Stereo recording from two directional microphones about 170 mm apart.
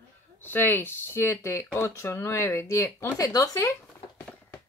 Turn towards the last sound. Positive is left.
turn(degrees=15)  # may be behind; listen again after turning